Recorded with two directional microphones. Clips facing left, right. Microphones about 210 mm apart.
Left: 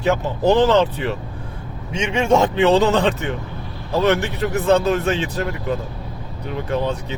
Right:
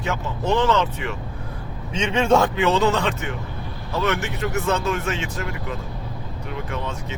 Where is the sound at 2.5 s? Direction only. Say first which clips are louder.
Left 4 dB; 35° left (ahead or behind).